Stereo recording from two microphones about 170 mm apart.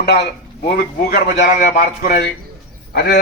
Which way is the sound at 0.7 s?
60° left (ahead or behind).